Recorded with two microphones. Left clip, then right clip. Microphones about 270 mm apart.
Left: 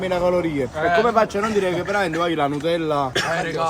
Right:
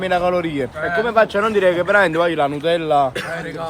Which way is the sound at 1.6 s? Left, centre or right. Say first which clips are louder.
Right 9 dB; right.